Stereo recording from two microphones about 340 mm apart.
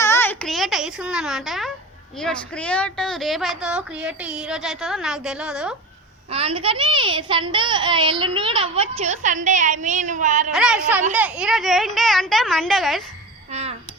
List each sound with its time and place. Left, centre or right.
0.0 s a sound: centre
2.2 s a woman's voice: centre
6.3 s a child's voice: centre
10.5 s a woman's voice: centre
13.5 s babbling: centre